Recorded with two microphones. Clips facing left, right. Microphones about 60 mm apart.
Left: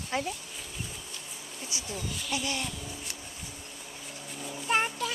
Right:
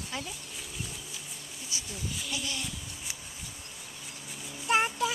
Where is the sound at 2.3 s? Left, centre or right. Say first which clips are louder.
Left 6 dB; left.